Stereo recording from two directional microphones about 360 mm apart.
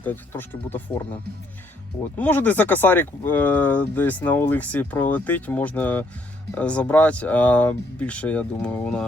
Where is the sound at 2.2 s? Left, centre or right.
Centre.